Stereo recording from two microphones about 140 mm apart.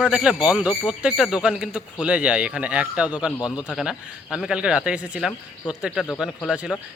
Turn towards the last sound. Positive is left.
turn(degrees=-5)  # may be behind; listen again after turning